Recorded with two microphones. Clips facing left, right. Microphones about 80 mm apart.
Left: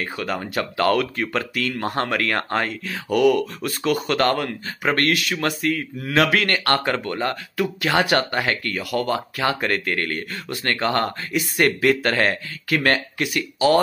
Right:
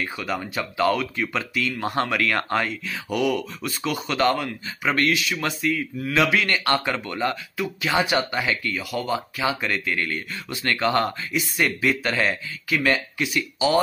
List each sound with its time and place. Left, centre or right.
0.0 s speech: left
7.5 s speech: left